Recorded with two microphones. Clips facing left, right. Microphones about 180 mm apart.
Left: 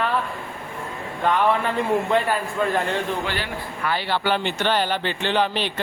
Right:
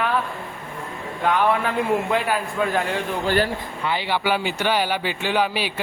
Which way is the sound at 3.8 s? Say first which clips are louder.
Even; 15° right (ahead or behind).